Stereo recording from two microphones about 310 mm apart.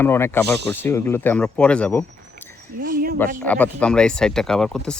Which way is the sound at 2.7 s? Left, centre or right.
Right.